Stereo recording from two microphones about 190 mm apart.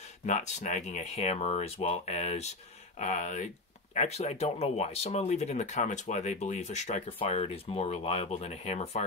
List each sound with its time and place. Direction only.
0.3 s speech: 40° left (ahead or behind)